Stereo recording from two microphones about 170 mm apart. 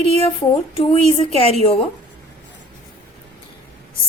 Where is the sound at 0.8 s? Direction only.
35° left (ahead or behind).